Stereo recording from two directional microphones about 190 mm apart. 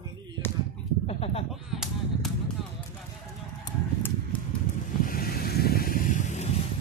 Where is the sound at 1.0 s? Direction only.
30° left (ahead or behind).